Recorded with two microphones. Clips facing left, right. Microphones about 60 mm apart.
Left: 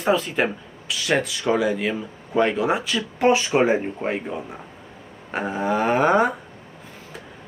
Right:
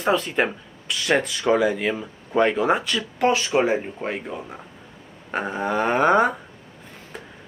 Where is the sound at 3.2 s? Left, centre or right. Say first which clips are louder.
Left 2 dB; left.